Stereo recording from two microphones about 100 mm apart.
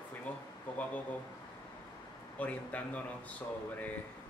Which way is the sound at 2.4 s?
15° left (ahead or behind).